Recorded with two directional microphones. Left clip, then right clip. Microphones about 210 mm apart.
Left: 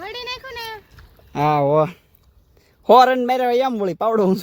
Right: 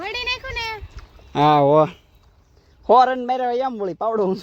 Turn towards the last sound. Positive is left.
turn(degrees=20)  # may be behind; listen again after turning